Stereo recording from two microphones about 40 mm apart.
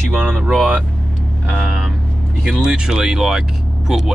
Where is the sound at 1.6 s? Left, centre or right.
Centre.